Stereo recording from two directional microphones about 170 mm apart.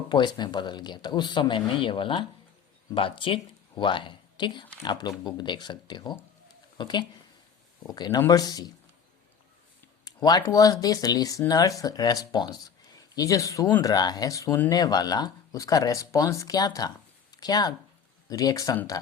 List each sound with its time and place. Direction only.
0.1 s speech: 25° left (ahead or behind)
10.0 s speech: 20° left (ahead or behind)